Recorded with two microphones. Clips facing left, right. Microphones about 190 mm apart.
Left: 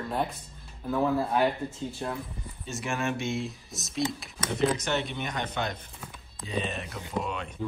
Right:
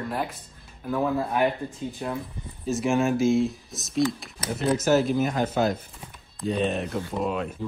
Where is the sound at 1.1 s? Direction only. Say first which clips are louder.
Right 1 dB; 15° right (ahead or behind).